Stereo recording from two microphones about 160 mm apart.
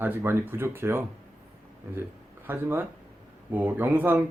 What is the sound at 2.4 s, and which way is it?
Speech, 10° right (ahead or behind).